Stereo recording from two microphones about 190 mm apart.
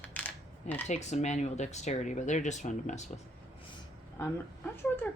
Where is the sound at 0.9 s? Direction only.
35° left (ahead or behind).